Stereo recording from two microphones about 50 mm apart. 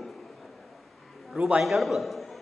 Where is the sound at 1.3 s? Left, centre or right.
Right.